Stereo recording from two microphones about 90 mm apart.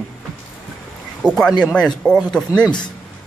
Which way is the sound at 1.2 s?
5° left (ahead or behind).